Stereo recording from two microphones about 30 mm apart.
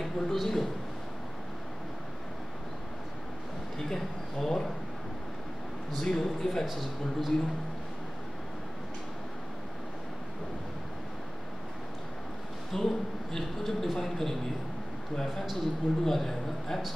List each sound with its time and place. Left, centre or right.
0.0 s a sound: centre
3.7 s a sound: centre
5.9 s speech: left
6.6 s a man's voice: centre
12.7 s a man's voice: centre
15.4 s a man's voice: centre